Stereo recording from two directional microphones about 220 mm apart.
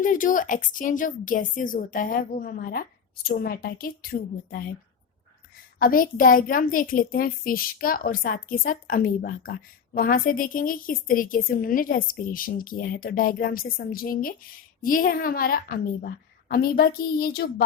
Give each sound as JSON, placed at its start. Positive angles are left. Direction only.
{"t": 0.0, "sound": "a child's voice", "side_deg": 35}
{"t": 5.8, "sound": "a child's voice", "side_deg": 40}